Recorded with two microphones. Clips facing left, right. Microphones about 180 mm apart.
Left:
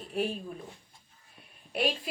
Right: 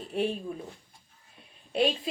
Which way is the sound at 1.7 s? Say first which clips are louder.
Right 4 dB; 25° right (ahead or behind).